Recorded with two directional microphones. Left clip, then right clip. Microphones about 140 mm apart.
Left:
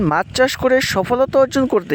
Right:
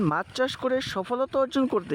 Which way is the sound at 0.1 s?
40° left (ahead or behind).